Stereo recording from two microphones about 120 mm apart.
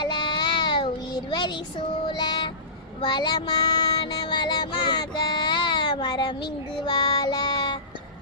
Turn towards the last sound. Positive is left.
turn(degrees=40)  # may be behind; listen again after turning